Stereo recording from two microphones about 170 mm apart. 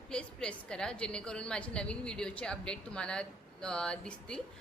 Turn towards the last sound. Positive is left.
turn(degrees=5)  # may be behind; listen again after turning